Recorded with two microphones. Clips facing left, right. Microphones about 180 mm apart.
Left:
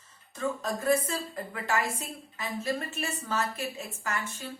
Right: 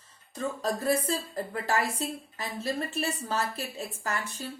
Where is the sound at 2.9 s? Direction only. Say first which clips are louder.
Right 2 dB; 35° right (ahead or behind).